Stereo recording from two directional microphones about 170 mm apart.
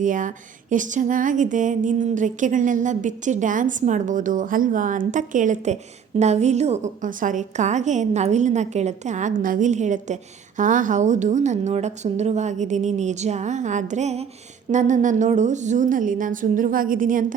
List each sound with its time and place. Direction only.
0.0 s speech: 50° right (ahead or behind)